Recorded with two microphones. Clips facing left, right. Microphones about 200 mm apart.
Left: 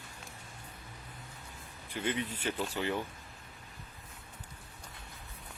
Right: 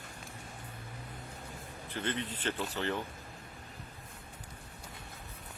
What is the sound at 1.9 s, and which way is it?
Speech, 10° left (ahead or behind).